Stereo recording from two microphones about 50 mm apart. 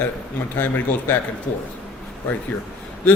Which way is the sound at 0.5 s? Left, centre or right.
Left.